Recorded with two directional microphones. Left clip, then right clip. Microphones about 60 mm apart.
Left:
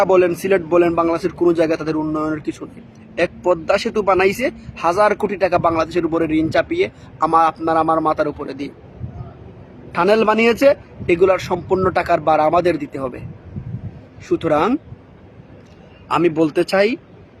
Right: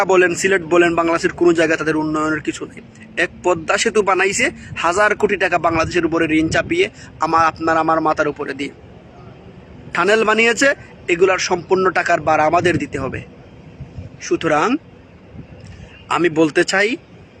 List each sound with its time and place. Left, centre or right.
0.0 s a man's voice: left
3.2 s a man's voice: centre
4.4 s a man's voice: left
9.9 s a man's voice: centre
11.0 s a man's voice: left
11.3 s speech: left
11.9 s a man's voice: left
14.2 s speech: left
16.1 s a man's voice: centre